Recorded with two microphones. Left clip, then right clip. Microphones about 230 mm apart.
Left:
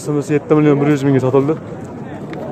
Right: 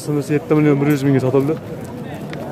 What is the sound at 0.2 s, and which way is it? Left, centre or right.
Speech, centre.